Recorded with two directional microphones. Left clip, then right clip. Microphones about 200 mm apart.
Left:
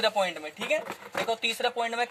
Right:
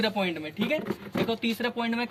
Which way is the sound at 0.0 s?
45° left (ahead or behind).